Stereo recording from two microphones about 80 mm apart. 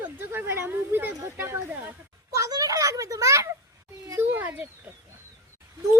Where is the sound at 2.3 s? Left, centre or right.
Right.